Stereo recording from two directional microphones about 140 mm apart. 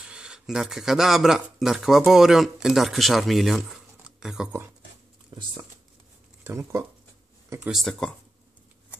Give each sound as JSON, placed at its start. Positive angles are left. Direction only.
{"t": 0.0, "sound": "speech", "side_deg": -5}
{"t": 5.3, "sound": "speech", "side_deg": -35}
{"t": 6.4, "sound": "speech", "side_deg": -20}
{"t": 7.7, "sound": "speech", "side_deg": 5}